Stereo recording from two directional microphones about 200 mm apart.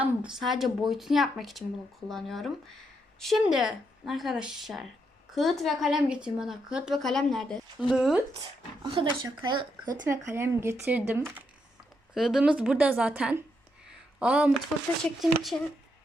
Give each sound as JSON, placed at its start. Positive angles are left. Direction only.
{"t": 0.0, "sound": "speech", "side_deg": -5}
{"t": 8.8, "sound": "speech", "side_deg": -20}
{"t": 9.8, "sound": "speech", "side_deg": -45}
{"t": 10.1, "sound": "speech", "side_deg": -15}
{"t": 15.5, "sound": "speech", "side_deg": 10}